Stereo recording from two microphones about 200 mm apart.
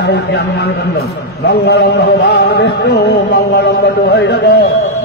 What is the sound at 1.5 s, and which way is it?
A man's voice, 55° left (ahead or behind).